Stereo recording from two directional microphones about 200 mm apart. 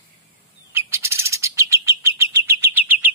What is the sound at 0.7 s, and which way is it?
Bird, 10° right (ahead or behind).